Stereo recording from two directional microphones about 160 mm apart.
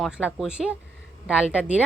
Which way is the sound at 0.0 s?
5° right (ahead or behind).